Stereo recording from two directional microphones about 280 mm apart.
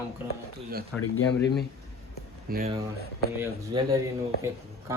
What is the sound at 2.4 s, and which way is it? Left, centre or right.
Speech, right.